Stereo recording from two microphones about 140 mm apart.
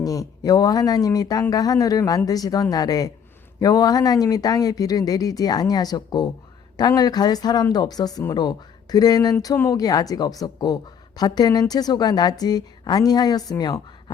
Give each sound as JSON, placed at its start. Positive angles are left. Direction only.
{"t": 0.0, "sound": "speech", "side_deg": 25}